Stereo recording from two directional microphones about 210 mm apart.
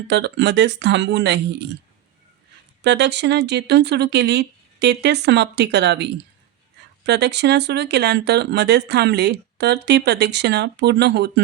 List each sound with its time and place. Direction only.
0.1 s speech: 55° right (ahead or behind)
2.8 s speech: 55° right (ahead or behind)